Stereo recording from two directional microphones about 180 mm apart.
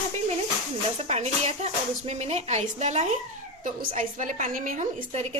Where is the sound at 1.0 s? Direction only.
40° right (ahead or behind).